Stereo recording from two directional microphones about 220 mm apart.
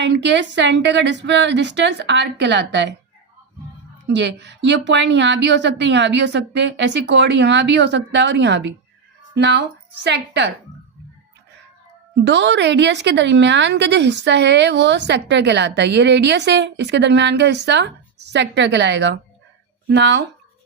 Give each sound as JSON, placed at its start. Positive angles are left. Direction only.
{"t": 0.0, "sound": "a woman's voice", "side_deg": -50}
{"t": 4.0, "sound": "a woman's voice", "side_deg": -50}
{"t": 12.2, "sound": "a woman's voice", "side_deg": -55}